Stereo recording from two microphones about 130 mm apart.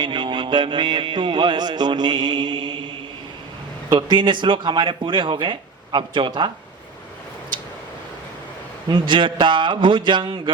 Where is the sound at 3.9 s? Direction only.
35° right (ahead or behind).